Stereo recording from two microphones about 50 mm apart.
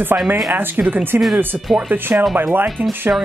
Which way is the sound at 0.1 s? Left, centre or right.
Right.